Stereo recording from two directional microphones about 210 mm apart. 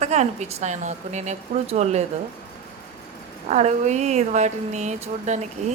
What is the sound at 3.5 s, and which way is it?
Speech, 35° right (ahead or behind).